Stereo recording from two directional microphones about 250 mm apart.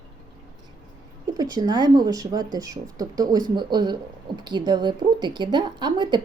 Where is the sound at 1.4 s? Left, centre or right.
Centre.